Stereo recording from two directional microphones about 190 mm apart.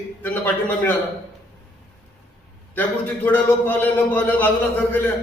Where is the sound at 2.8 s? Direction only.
10° left (ahead or behind).